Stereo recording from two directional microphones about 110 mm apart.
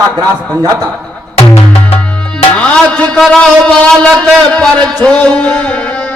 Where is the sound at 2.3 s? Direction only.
10° left (ahead or behind).